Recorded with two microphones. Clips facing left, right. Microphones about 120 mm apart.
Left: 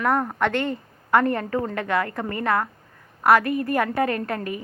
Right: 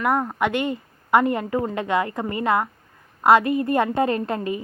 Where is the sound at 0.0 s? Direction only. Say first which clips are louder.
Even; 10° right (ahead or behind).